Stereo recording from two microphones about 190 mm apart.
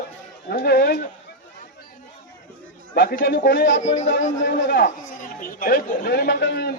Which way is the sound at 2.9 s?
55° left (ahead or behind).